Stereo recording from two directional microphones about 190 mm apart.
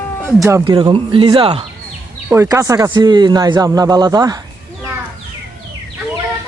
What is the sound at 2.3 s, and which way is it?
Speech, 15° right (ahead or behind).